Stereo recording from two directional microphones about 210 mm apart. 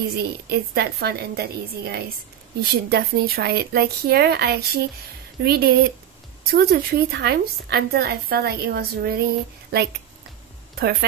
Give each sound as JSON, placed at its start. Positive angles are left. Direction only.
{"t": 0.2, "sound": "a woman's voice", "side_deg": -50}